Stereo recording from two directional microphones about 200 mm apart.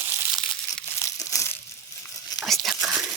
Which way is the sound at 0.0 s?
10° right (ahead or behind).